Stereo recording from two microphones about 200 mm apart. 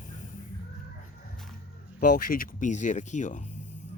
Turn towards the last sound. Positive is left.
turn(degrees=35)  # may be behind; listen again after turning